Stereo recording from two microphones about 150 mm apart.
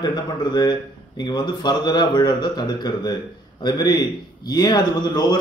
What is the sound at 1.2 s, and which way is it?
A man's voice, 30° left (ahead or behind).